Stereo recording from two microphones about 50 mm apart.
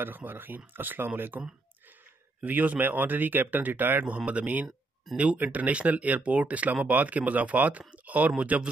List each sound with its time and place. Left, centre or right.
0.0 s speech: right
2.4 s speech: right